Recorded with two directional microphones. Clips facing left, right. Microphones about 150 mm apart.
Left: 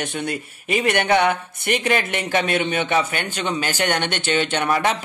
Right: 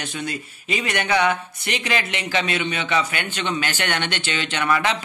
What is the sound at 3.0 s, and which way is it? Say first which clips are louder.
A man's voice: left 2 dB; 40° left (ahead or behind).